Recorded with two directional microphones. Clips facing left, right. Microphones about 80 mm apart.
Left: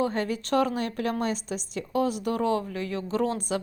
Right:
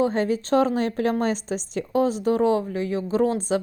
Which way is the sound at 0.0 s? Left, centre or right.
Right.